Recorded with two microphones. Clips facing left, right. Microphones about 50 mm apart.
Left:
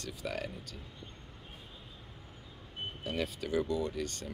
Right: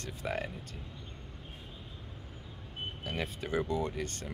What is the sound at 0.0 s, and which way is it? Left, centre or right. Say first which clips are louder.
Speech: right 2 dB; right.